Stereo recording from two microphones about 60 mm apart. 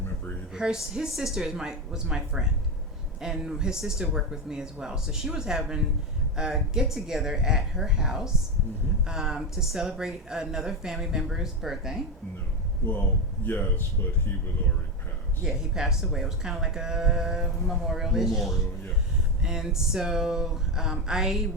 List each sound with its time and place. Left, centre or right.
0.5 s speech: centre
13.4 s a man's voice: left
15.4 s speech: centre